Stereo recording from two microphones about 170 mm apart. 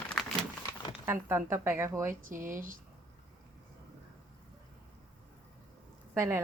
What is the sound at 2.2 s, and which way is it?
Speech, 50° right (ahead or behind).